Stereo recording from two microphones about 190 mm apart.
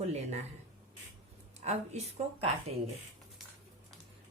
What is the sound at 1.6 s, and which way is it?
Speech, 35° right (ahead or behind).